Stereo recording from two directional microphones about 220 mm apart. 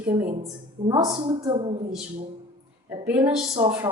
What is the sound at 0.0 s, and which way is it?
A woman's voice, 10° right (ahead or behind).